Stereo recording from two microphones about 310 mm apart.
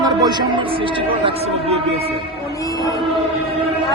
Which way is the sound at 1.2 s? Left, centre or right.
Centre.